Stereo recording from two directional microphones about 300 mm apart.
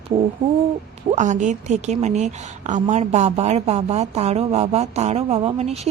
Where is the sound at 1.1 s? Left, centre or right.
Right.